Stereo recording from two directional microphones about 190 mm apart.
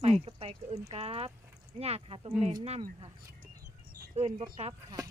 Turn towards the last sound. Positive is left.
turn(degrees=-35)  # may be behind; listen again after turning